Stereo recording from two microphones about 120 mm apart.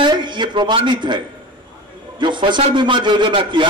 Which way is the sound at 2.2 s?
40° right (ahead or behind).